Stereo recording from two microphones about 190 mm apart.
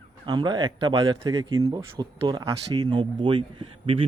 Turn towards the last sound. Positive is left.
turn(degrees=-25)  # may be behind; listen again after turning